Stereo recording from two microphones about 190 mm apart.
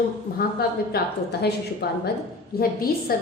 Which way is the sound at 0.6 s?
55° left (ahead or behind).